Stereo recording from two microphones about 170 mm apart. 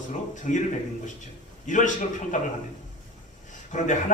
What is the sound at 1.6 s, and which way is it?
Speech, 45° left (ahead or behind).